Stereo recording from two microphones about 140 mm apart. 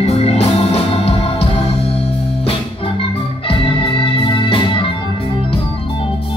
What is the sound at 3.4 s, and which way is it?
Organ, 40° left (ahead or behind).